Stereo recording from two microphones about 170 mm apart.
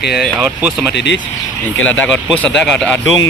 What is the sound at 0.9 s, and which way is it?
Speech, 90° left.